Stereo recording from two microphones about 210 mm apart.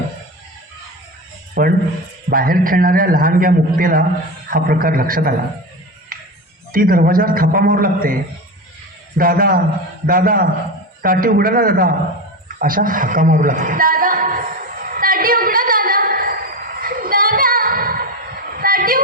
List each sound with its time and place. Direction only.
1.6 s a man's voice: 40° right (ahead or behind)
6.7 s a man's voice: 45° right (ahead or behind)
9.1 s a man's voice: 45° right (ahead or behind)
12.5 s a sound: 40° right (ahead or behind)